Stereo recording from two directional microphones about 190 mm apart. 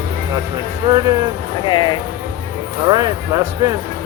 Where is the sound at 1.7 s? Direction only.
25° left (ahead or behind).